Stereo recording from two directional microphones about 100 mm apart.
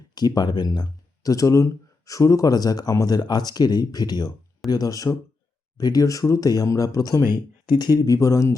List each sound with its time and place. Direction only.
0.1 s speech: 40° left (ahead or behind)